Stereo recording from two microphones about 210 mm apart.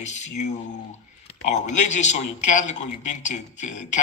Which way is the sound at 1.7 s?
35° left (ahead or behind).